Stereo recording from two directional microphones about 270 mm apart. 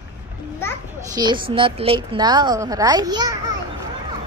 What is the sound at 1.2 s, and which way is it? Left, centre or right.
A woman's voice, centre.